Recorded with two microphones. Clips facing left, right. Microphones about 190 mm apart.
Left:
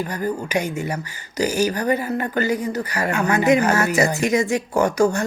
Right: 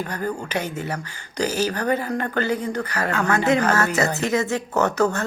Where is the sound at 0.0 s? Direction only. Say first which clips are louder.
Left 3 dB; 10° left (ahead or behind).